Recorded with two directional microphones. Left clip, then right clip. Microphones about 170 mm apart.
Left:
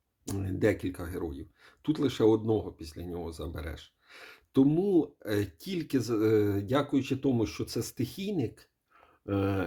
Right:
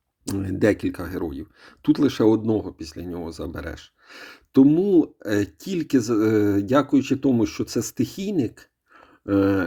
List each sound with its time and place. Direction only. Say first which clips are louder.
0.3 s speech: right 8 dB; 30° right (ahead or behind)